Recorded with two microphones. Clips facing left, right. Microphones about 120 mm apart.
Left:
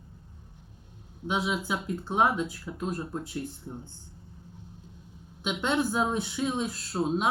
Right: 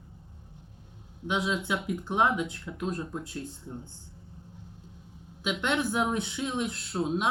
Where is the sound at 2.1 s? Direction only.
15° left (ahead or behind).